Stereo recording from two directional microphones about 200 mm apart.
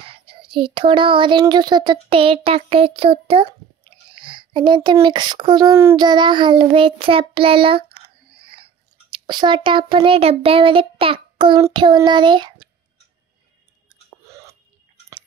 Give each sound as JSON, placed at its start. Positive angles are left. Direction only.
{"t": 0.0, "sound": "a child's voice", "side_deg": -25}
{"t": 14.1, "sound": "chewing", "side_deg": -15}